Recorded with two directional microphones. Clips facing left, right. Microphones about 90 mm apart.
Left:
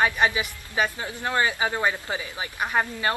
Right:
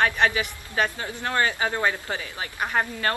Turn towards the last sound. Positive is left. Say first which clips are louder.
# even
turn(degrees=10)  # may be behind; listen again after turning